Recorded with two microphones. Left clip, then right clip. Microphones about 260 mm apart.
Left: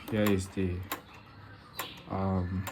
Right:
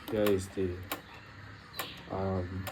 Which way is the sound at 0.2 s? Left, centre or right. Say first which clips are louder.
Right 1 dB; left.